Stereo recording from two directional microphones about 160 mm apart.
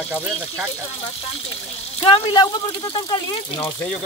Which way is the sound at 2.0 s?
30° left (ahead or behind).